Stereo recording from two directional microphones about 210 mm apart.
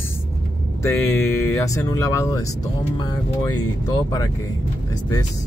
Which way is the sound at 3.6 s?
15° left (ahead or behind).